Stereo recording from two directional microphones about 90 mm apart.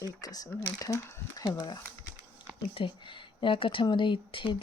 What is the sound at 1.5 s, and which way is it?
Speech, 55° left (ahead or behind).